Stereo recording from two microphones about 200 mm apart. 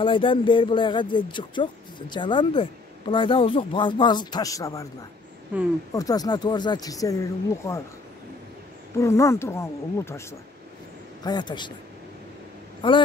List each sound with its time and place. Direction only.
0.0 s speech: 25° left (ahead or behind)
5.9 s speech: 20° left (ahead or behind)
8.9 s speech: 15° left (ahead or behind)
11.2 s speech: 20° left (ahead or behind)
12.8 s speech: 25° left (ahead or behind)